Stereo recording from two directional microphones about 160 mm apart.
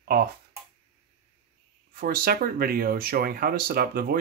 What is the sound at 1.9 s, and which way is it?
Speech, 65° right (ahead or behind).